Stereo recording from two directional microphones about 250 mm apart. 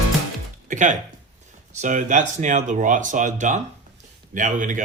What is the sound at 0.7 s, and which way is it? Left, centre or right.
Music, right.